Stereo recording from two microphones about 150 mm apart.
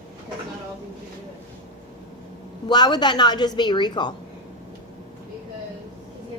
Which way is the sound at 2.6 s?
30° left (ahead or behind).